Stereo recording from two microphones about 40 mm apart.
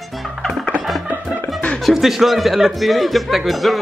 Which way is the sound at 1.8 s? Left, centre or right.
Centre.